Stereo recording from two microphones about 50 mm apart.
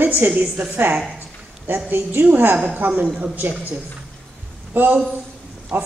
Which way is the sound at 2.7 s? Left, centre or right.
Right.